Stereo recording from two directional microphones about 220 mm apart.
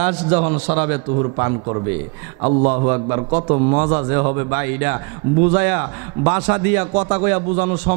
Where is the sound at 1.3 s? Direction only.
25° right (ahead or behind).